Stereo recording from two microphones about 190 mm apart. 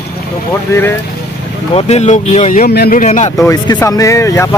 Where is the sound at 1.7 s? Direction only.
35° left (ahead or behind).